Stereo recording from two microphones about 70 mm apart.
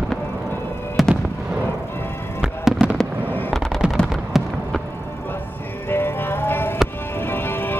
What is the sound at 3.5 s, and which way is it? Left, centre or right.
Gunshot, centre.